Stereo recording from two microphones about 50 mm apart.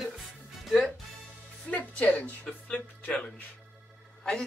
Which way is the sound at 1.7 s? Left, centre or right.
Left.